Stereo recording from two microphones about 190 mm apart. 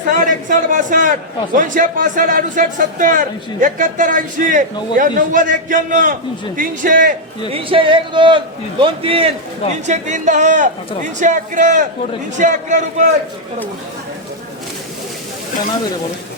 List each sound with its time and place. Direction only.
0.1 s a man's voice: 45° right (ahead or behind)
7.5 s a man's voice: 30° right (ahead or behind)